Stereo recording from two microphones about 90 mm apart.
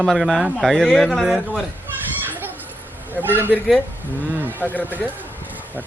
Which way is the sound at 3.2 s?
25° right (ahead or behind).